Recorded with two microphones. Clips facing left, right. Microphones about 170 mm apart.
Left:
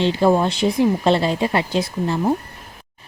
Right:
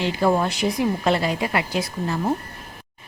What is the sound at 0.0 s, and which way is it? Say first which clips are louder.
A woman's voice: left 4 dB; 25° left (ahead or behind).